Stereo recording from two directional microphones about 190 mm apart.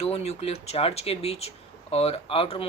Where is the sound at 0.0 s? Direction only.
35° left (ahead or behind).